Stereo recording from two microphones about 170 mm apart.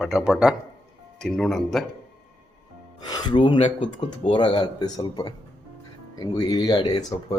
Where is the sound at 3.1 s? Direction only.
25° left (ahead or behind).